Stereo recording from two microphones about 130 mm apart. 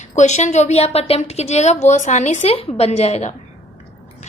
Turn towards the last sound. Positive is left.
turn(degrees=60)  # may be behind; listen again after turning